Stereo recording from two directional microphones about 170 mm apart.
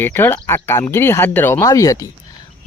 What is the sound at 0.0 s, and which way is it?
Speech, 10° left (ahead or behind).